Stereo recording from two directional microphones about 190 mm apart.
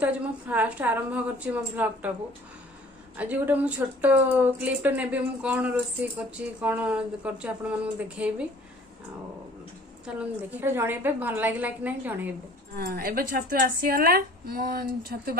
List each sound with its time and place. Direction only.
0.0 s speech: 10° right (ahead or behind)
3.2 s speech: 10° right (ahead or behind)
10.2 s speech: 10° right (ahead or behind)
12.7 s speech: 50° right (ahead or behind)